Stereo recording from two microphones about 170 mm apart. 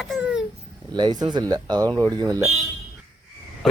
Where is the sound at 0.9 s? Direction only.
25° right (ahead or behind).